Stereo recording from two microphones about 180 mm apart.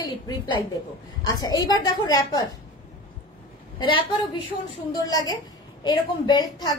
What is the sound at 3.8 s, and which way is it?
A woman's voice, 25° left (ahead or behind).